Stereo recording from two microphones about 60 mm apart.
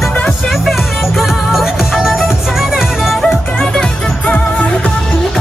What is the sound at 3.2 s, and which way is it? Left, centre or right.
Music, centre.